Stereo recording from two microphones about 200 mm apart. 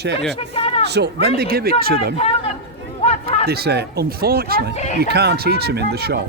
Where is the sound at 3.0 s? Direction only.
30° left (ahead or behind).